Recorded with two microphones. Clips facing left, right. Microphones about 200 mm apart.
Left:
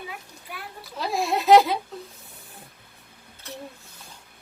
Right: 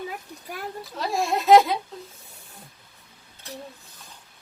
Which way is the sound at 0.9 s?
Centre (ahead or behind).